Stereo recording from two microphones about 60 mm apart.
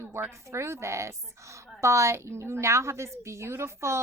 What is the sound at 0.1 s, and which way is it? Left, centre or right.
A woman's voice, right.